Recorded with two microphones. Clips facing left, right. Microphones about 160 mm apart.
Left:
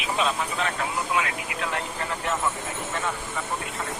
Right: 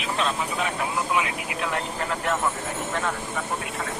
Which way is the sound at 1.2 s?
20° right (ahead or behind).